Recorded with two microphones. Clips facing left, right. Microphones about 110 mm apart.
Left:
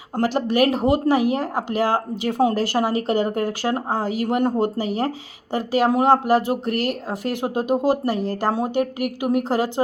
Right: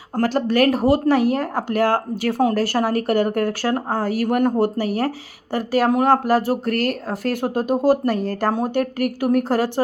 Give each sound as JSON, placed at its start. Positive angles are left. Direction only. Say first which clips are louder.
{"t": 0.2, "sound": "speech", "louder": "right 1 dB", "side_deg": 15}